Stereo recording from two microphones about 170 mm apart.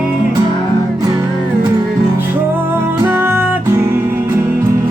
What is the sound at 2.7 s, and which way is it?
Music, 15° right (ahead or behind).